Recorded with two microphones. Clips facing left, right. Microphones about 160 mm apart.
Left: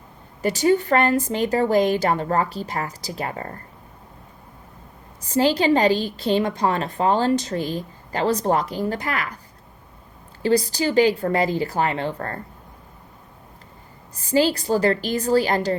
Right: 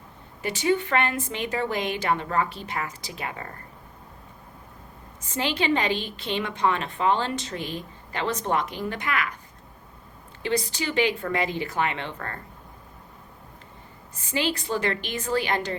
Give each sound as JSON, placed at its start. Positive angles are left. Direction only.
{"t": 0.4, "sound": "a woman's voice", "side_deg": 40}
{"t": 5.2, "sound": "a woman's voice", "side_deg": 35}
{"t": 10.4, "sound": "a woman's voice", "side_deg": 35}
{"t": 14.2, "sound": "a woman's voice", "side_deg": 35}